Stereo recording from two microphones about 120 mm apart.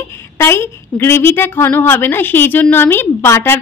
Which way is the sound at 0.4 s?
20° left (ahead or behind).